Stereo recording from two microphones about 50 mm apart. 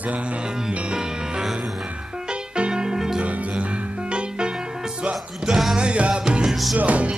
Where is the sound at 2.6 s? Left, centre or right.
Centre.